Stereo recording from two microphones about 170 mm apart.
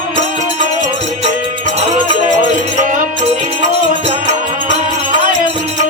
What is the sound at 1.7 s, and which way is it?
Music, 45° right (ahead or behind).